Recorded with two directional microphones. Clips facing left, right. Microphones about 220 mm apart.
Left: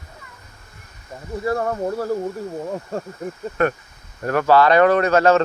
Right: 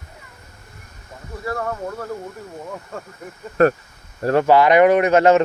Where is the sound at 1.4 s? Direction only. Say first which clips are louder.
Left 4 dB; 30° left (ahead or behind).